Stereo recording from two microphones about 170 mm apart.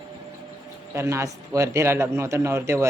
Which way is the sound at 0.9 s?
15° right (ahead or behind).